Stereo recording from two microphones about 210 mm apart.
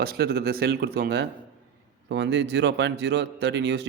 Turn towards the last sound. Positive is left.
turn(degrees=-55)  # may be behind; listen again after turning